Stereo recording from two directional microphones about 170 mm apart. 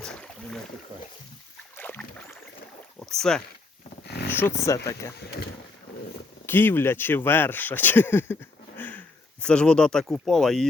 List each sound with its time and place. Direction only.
0.0 s boat: 5° left (ahead or behind)
1.7 s boat: 10° left (ahead or behind)
3.0 s speech: 5° left (ahead or behind)
4.0 s roaring cats: 75° left (ahead or behind)
4.3 s speech: 10° left (ahead or behind)
6.4 s speech: 15° left (ahead or behind)